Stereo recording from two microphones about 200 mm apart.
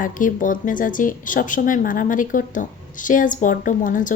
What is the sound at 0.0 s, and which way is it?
A woman's voice, 40° left (ahead or behind).